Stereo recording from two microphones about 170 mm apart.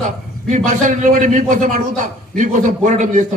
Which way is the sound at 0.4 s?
45° right (ahead or behind).